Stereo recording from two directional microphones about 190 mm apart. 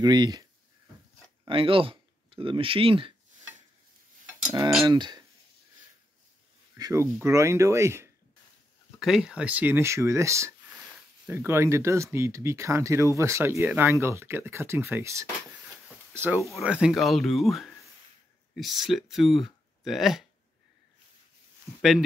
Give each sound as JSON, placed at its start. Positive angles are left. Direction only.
{"t": 0.0, "sound": "speech", "side_deg": -20}
{"t": 4.5, "sound": "cutlery", "side_deg": -20}
{"t": 4.8, "sound": "speech", "side_deg": -25}
{"t": 6.8, "sound": "speech", "side_deg": -15}
{"t": 9.0, "sound": "speech", "side_deg": -5}